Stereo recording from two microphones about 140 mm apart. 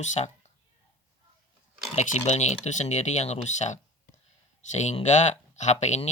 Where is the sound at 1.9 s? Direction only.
55° left (ahead or behind).